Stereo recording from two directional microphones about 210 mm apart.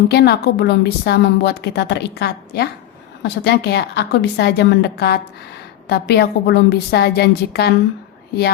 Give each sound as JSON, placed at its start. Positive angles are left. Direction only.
{"t": 0.1, "sound": "a woman's voice", "side_deg": 50}